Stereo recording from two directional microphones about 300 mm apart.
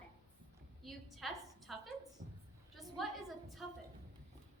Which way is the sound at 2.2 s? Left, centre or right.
Right.